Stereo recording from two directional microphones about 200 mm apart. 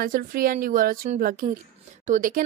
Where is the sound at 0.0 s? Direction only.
45° right (ahead or behind).